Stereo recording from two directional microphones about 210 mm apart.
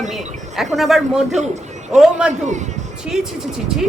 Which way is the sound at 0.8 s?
Centre (ahead or behind).